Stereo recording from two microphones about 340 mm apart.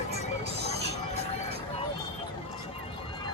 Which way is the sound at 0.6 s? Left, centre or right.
Right.